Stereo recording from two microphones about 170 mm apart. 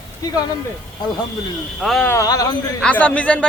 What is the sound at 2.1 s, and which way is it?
Speech, 20° left (ahead or behind).